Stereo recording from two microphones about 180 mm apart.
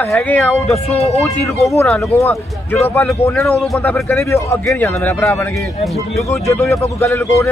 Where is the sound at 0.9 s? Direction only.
35° left (ahead or behind).